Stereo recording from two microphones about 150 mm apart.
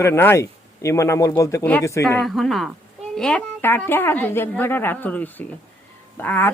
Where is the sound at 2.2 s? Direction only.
Centre (ahead or behind).